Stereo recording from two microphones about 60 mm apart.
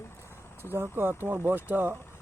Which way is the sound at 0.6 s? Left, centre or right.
Right.